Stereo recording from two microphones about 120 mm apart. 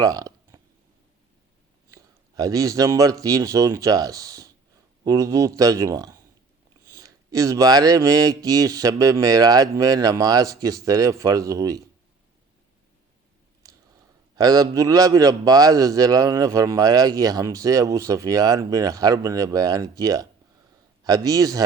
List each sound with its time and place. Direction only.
0.0 s a sound: 30° right (ahead or behind)
1.9 s a man's voice: 30° right (ahead or behind)
14.3 s a man's voice: 30° right (ahead or behind)